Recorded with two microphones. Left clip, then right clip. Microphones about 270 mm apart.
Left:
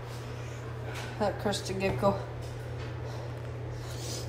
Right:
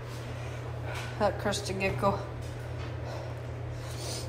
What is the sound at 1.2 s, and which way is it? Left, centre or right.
Speech, centre.